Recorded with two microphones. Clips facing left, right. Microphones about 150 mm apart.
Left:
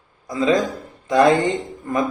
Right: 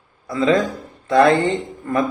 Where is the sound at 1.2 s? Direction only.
15° left (ahead or behind).